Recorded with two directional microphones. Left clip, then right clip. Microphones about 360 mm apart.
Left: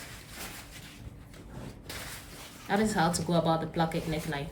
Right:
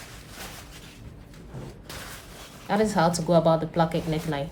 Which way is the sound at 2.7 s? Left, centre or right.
Centre.